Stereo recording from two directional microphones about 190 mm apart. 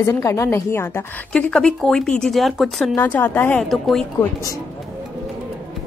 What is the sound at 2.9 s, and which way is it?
Speech, 10° left (ahead or behind).